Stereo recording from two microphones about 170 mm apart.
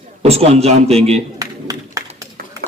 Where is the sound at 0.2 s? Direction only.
35° right (ahead or behind).